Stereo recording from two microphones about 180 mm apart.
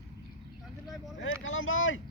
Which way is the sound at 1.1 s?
90° left.